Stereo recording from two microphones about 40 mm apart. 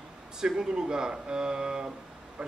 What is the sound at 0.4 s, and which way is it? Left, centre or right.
Speech, centre.